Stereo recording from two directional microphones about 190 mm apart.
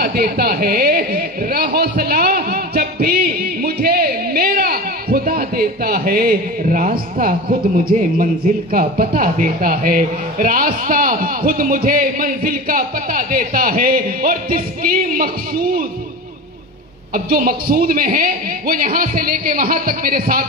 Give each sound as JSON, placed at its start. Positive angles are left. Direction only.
{"t": 0.0, "sound": "speech", "side_deg": -55}
{"t": 17.1, "sound": "a man's voice", "side_deg": -45}